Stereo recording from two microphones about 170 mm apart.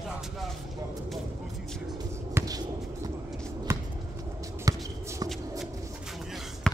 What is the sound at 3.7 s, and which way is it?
Basketball bounce, 15° right (ahead or behind).